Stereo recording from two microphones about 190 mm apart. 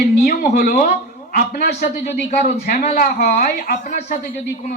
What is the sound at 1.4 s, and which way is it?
A woman's voice, 55° left (ahead or behind).